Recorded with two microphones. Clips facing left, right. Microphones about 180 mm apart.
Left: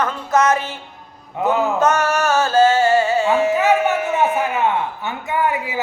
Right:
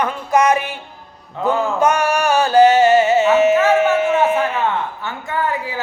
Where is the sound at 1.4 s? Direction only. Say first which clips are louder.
Even; 20° left (ahead or behind).